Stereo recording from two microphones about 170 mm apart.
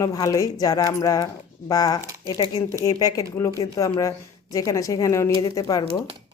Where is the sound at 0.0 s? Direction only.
20° left (ahead or behind).